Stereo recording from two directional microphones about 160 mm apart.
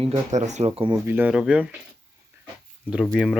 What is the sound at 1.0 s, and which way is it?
Speech, 10° right (ahead or behind).